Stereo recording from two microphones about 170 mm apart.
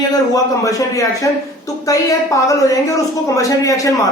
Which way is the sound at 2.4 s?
20° left (ahead or behind).